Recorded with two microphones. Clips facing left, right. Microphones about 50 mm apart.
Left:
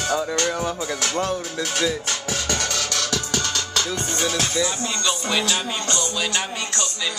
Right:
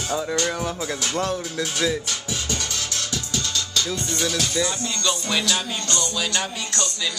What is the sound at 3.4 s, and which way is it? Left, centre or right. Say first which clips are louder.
Music: left 1 dB; left.